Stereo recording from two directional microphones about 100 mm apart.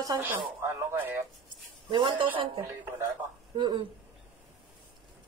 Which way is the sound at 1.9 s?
55° right (ahead or behind).